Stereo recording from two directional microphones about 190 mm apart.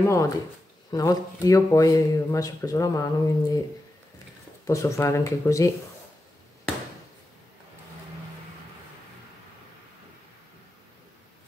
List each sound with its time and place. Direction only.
0.0 s speech: 15° left (ahead or behind)
4.6 s speech: 15° left (ahead or behind)